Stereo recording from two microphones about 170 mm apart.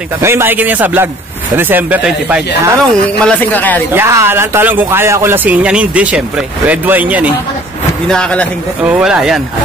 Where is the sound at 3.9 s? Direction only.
15° right (ahead or behind).